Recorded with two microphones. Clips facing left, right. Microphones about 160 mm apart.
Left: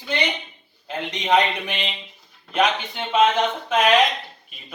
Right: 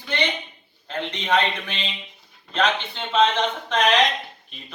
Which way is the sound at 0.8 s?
15° left (ahead or behind).